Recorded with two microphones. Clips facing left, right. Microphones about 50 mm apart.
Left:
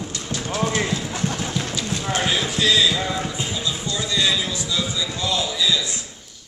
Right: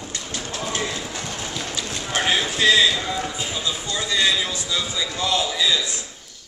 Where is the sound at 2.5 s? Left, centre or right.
Right.